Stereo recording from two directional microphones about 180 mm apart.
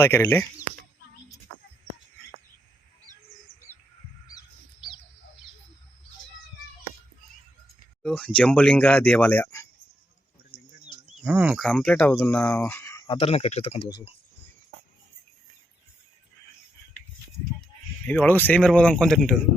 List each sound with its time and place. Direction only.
0.0 s speech: 10° left (ahead or behind)
8.0 s speech: 5° left (ahead or behind)
10.5 s bird: 15° left (ahead or behind)
11.2 s speech: 5° right (ahead or behind); by 13.1 s 15° left (ahead or behind)
13.1 s speech: 30° left (ahead or behind)
18.1 s speech: 10° left (ahead or behind)